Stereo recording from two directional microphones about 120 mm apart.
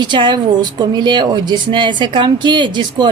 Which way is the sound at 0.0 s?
40° right (ahead or behind).